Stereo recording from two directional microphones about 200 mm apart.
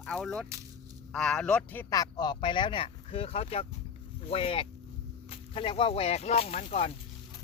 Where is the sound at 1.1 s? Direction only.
5° left (ahead or behind); by 6.9 s 35° left (ahead or behind).